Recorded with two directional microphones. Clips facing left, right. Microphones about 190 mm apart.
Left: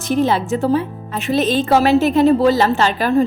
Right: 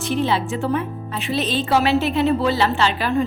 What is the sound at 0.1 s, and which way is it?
Speech, 45° left (ahead or behind).